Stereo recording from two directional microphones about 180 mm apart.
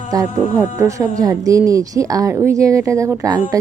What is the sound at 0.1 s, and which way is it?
Speech, 20° right (ahead or behind).